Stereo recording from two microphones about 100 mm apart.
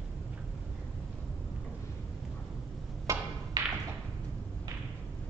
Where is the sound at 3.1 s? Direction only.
30° right (ahead or behind).